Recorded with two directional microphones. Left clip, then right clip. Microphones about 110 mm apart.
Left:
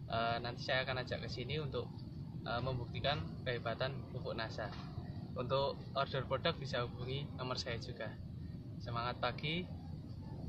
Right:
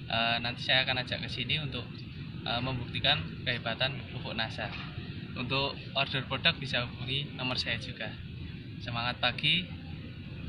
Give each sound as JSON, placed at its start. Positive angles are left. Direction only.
{"t": 0.1, "sound": "a man's voice", "side_deg": 30}
{"t": 8.8, "sound": "a man's voice", "side_deg": 30}